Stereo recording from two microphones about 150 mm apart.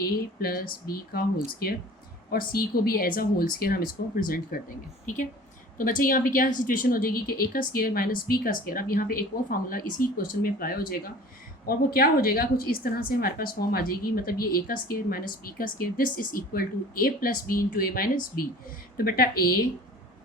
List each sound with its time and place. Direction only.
0.0 s a woman's voice: 85° left
2.5 s a woman's voice: 80° left
5.7 s a woman's voice: 65° left (ahead or behind)